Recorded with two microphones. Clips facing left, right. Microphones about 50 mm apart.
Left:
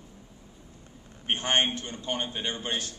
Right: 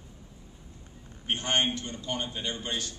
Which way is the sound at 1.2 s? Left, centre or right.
Left.